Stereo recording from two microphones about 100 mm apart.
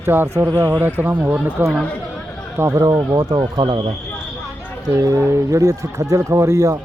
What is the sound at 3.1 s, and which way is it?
Speech, 40° right (ahead or behind).